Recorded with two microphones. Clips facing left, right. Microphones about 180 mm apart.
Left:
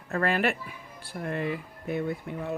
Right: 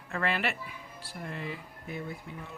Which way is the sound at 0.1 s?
45° left (ahead or behind).